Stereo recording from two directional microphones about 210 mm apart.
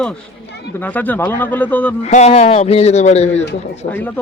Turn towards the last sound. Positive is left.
turn(degrees=30)  # may be behind; listen again after turning